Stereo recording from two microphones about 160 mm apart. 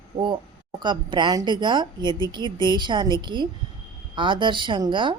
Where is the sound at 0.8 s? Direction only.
30° right (ahead or behind).